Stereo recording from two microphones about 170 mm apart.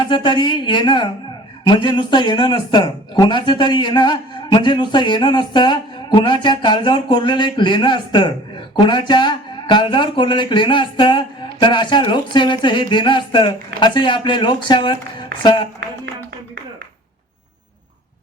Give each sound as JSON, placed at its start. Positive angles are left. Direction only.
{"t": 0.1, "sound": "a man's voice", "side_deg": 25}